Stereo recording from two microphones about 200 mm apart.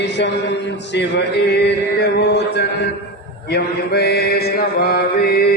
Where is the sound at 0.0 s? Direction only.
60° left (ahead or behind).